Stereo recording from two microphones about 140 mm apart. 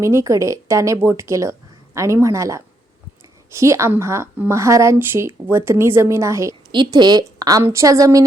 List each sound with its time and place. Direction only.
0.0 s a woman's voice: 20° right (ahead or behind)
6.7 s a woman's voice: 30° right (ahead or behind)